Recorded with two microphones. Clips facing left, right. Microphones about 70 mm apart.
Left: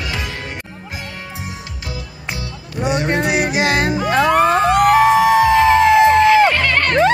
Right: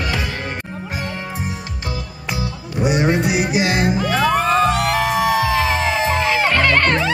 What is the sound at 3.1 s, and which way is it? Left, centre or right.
Music, left.